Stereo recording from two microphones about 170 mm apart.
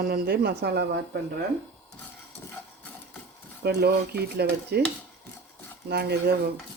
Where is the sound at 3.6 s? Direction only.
70° right (ahead or behind).